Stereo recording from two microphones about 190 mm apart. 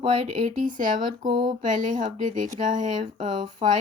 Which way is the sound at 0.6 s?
45° right (ahead or behind).